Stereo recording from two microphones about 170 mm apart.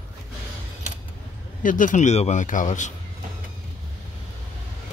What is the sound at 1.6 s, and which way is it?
A man's voice, 50° left (ahead or behind).